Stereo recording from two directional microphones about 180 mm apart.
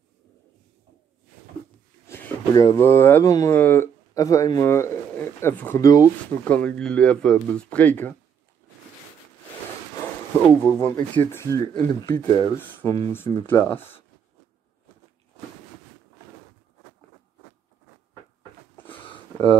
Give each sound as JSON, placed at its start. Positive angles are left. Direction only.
{"t": 2.0, "sound": "speech", "side_deg": 15}
{"t": 10.6, "sound": "speech", "side_deg": 15}
{"t": 12.5, "sound": "speech", "side_deg": 15}
{"t": 18.9, "sound": "a sound", "side_deg": 30}